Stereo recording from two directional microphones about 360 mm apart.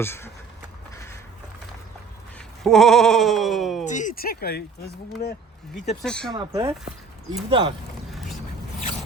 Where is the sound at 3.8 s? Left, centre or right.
Left.